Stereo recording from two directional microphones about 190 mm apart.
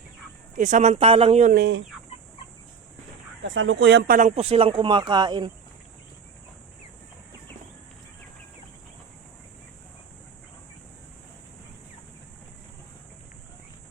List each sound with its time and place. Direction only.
0.5 s speech: 40° right (ahead or behind)
1.5 s chicken: 60° right (ahead or behind)
3.4 s speech: 90° right; by 5.5 s 25° right (ahead or behind)